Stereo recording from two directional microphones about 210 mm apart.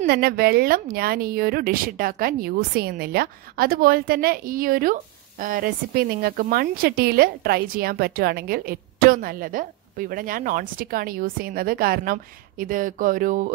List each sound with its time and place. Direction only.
0.0 s speech: 45° right (ahead or behind)